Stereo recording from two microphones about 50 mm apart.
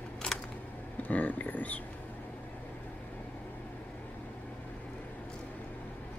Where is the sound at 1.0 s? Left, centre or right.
Left.